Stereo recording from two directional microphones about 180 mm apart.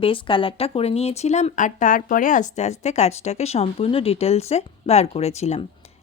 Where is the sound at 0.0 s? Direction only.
30° left (ahead or behind).